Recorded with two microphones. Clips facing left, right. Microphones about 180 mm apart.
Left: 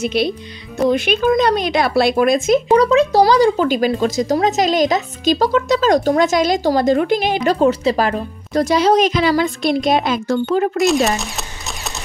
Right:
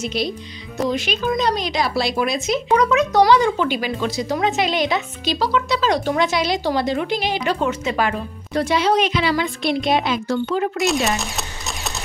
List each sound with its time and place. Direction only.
0.0 s a woman's voice: 60° left (ahead or behind)
2.7 s speech: 30° left (ahead or behind); by 10.8 s 45° left (ahead or behind)
10.8 s speech: centre (ahead or behind)